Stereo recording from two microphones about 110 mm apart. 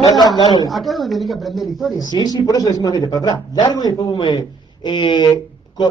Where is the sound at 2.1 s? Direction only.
35° left (ahead or behind).